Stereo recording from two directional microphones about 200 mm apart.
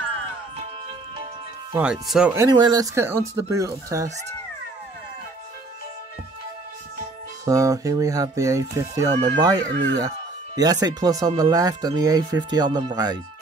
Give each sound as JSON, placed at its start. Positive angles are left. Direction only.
{"t": 1.7, "sound": "speech", "side_deg": -5}
{"t": 2.3, "sound": "speech", "side_deg": -20}
{"t": 7.4, "sound": "speech", "side_deg": -15}